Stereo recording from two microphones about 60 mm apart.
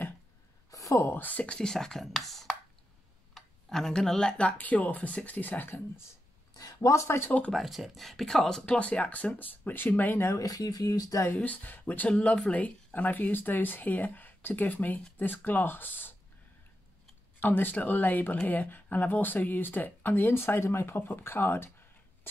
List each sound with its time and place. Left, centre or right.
0.7 s a sound: left
1.0 s speech: left
1.4 s speech: centre; by 5.8 s left
6.5 s speech: left
7.1 s speech: left
7.5 s speech: centre
8.6 s speech: left
10.2 s speech: left
11.3 s speech: left
17.4 s speech: left